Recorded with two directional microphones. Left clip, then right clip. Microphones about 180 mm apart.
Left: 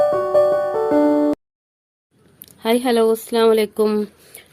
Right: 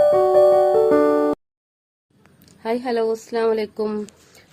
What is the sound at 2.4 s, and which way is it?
A woman's voice, 50° left (ahead or behind).